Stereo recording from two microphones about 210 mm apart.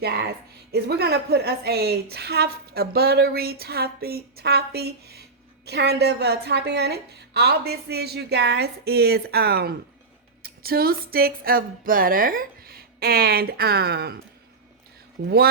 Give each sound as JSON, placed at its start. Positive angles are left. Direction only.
{"t": 0.7, "sound": "a woman's voice", "side_deg": -50}
{"t": 15.2, "sound": "a woman's voice", "side_deg": -50}